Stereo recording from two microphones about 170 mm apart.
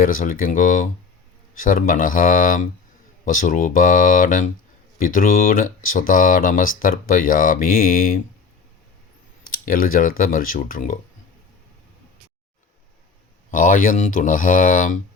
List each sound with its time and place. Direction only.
0.0 s speech: 55° left (ahead or behind)
9.4 s speech: 55° left (ahead or behind)
13.5 s speech: 50° left (ahead or behind)